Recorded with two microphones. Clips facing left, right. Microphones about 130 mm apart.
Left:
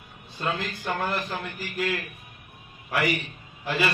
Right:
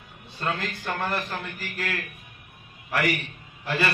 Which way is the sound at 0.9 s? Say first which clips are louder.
Left 1 dB; 10° left (ahead or behind).